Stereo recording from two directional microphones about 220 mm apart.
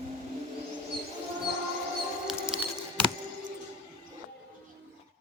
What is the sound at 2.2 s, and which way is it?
Music, 5° right (ahead or behind).